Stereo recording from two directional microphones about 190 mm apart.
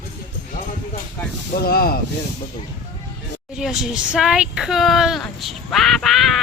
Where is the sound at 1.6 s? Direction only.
50° left (ahead or behind).